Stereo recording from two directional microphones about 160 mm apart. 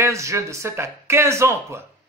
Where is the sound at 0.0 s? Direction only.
20° right (ahead or behind).